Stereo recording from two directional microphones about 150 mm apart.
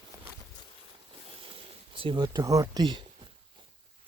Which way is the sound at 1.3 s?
40° right (ahead or behind).